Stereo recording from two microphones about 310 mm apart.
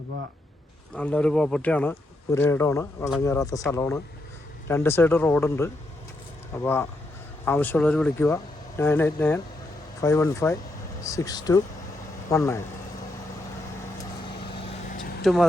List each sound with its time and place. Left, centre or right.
0.9 s speech: centre
14.5 s vehicle: left
15.2 s speech: centre